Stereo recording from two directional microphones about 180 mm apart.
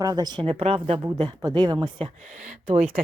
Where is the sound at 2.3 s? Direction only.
40° right (ahead or behind).